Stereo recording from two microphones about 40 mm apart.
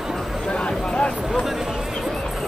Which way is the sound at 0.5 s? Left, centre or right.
Left.